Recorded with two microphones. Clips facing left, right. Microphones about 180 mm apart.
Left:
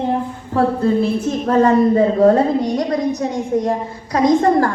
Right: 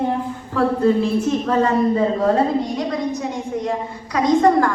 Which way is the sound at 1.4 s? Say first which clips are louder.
Left 9 dB; 40° left (ahead or behind).